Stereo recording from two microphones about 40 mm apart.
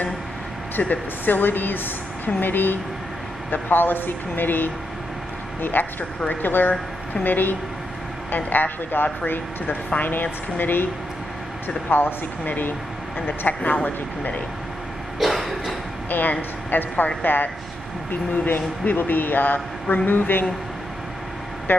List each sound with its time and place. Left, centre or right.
0.8 s speech: left
1.2 s a woman's voice: left
13.7 s a man's voice: left
15.1 s cough: centre
16.1 s a man's voice: left
21.7 s speech: left